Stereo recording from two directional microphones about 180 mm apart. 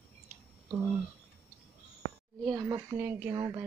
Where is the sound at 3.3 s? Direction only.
25° right (ahead or behind).